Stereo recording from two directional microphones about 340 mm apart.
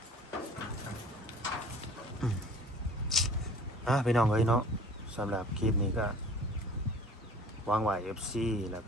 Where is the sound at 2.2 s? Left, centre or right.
Centre.